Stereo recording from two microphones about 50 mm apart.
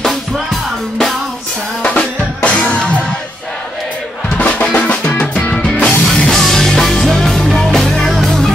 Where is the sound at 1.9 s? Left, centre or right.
Left.